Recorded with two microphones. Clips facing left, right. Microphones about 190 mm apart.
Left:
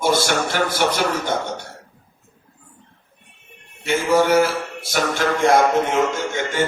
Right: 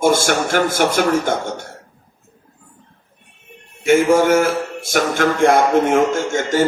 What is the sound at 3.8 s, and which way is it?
A man's voice, 50° right (ahead or behind).